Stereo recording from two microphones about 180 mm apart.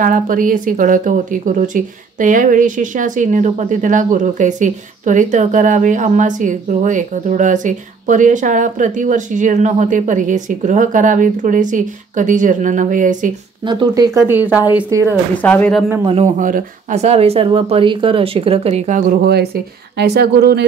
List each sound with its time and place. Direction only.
0.0 s speech: 50° right (ahead or behind)
13.7 s speech: 25° right (ahead or behind)
15.4 s speech: 10° left (ahead or behind)
16.3 s speech: 45° right (ahead or behind); by 20.6 s 65° right (ahead or behind)